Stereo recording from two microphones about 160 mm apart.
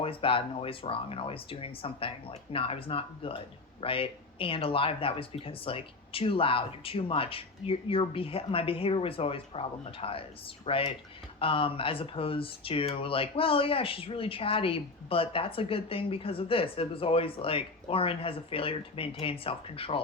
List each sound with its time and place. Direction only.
0.0 s speech: 35° left (ahead or behind)